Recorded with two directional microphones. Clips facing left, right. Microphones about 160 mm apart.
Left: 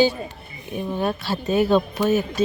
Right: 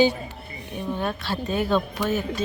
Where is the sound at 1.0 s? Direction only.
10° left (ahead or behind).